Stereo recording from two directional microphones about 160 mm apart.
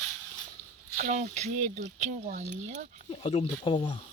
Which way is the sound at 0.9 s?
50° right (ahead or behind).